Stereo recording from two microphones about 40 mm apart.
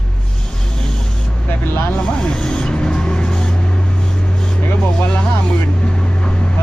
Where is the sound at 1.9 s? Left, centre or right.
Left.